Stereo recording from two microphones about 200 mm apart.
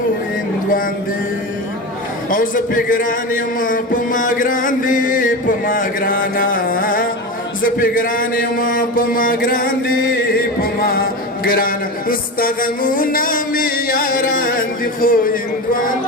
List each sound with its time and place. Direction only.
2.3 s a man's voice: 40° left (ahead or behind)
7.6 s mantra: 45° left (ahead or behind)
15.0 s music: 45° left (ahead or behind)